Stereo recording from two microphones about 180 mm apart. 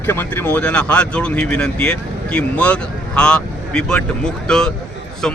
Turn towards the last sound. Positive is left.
turn(degrees=5)  # may be behind; listen again after turning